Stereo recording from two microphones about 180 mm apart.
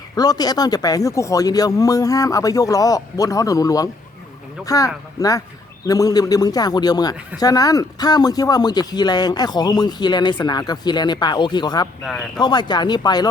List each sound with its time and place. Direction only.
0.2 s speech: 20° left (ahead or behind)